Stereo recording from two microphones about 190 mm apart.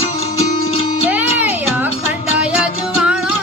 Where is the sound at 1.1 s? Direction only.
10° right (ahead or behind).